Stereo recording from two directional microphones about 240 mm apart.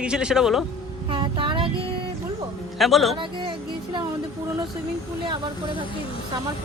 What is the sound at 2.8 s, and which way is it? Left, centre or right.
Speech, centre.